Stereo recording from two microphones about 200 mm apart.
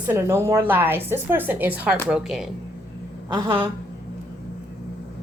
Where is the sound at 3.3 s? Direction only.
20° right (ahead or behind).